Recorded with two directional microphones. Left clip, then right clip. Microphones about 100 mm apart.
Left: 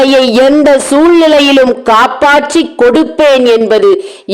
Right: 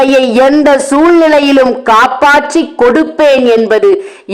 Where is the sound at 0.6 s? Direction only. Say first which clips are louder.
Left 1 dB; 10° left (ahead or behind).